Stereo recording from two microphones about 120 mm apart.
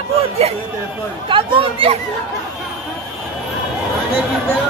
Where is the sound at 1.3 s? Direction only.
50° right (ahead or behind).